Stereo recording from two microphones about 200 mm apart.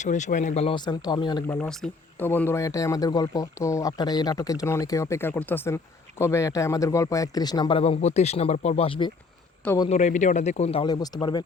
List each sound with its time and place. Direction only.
0.0 s speech: 35° left (ahead or behind); by 1.5 s 20° left (ahead or behind)
1.5 s speech: 5° left (ahead or behind); by 11.4 s 20° left (ahead or behind)